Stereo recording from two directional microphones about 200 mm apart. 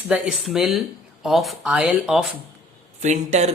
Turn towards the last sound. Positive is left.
turn(degrees=-35)  # may be behind; listen again after turning